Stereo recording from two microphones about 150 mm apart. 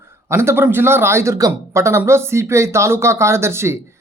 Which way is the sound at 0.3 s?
15° right (ahead or behind).